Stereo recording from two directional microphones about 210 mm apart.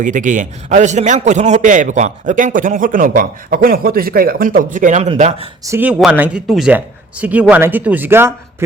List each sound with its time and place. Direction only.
0.0 s a man's voice: 35° right (ahead or behind)
5.6 s speech: 10° right (ahead or behind)